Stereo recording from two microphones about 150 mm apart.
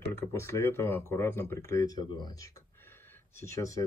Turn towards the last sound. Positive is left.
turn(degrees=20)  # may be behind; listen again after turning